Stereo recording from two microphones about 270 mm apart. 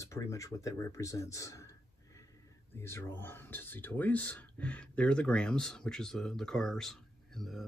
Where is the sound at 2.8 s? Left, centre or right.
Centre.